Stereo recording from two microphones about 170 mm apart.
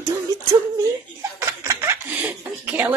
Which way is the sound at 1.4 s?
15° right (ahead or behind).